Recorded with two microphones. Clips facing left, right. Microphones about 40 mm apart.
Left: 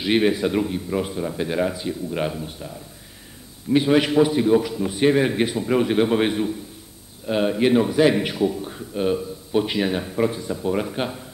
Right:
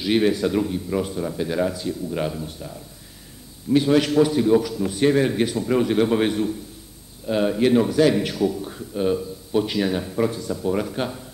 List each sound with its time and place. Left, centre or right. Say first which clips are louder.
0.0 s a man's voice: even; left